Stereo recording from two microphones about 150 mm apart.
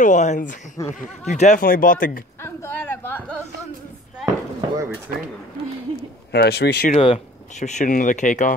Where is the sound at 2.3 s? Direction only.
15° left (ahead or behind).